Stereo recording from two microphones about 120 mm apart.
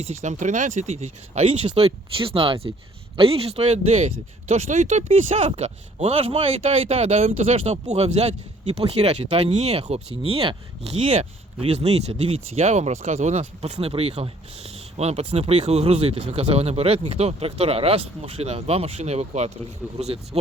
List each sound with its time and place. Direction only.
0.0 s speech: 70° right (ahead or behind)
13.4 s speech: 60° right (ahead or behind)